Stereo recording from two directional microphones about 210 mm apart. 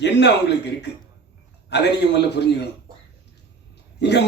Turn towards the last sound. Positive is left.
turn(degrees=55)  # may be behind; listen again after turning